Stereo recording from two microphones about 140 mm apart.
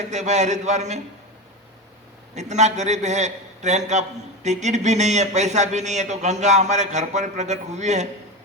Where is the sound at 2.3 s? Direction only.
55° right (ahead or behind).